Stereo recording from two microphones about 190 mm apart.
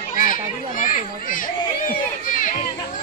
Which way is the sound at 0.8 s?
45° left (ahead or behind).